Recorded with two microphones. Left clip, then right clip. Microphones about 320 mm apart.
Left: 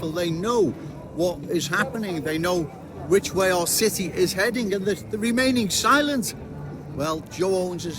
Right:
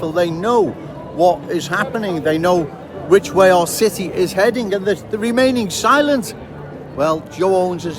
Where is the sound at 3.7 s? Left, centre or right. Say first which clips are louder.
Right 6 dB; centre.